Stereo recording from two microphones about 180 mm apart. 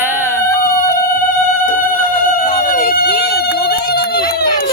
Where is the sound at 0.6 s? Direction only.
50° left (ahead or behind).